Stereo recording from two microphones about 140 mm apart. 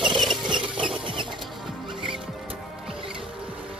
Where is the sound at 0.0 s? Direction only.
Centre (ahead or behind).